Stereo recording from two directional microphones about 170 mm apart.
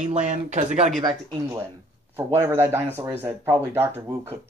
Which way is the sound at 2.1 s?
15° right (ahead or behind).